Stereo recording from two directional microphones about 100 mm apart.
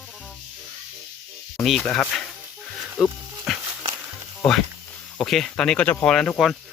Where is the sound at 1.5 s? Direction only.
Centre (ahead or behind).